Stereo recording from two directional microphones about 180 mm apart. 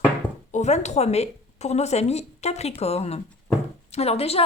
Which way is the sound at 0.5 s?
40° left (ahead or behind).